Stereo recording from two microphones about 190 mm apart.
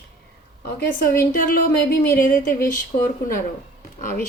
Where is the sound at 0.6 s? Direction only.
50° left (ahead or behind).